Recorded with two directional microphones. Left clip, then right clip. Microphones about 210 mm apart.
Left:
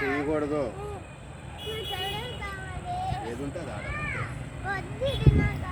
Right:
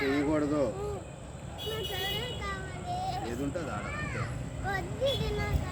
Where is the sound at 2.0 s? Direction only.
40° right (ahead or behind).